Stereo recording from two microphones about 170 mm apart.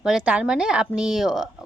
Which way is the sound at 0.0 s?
5° right (ahead or behind).